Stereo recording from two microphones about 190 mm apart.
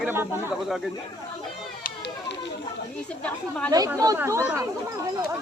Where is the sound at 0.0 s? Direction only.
10° right (ahead or behind).